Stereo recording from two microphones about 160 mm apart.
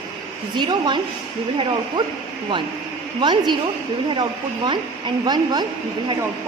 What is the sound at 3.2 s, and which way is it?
Speech, 30° right (ahead or behind).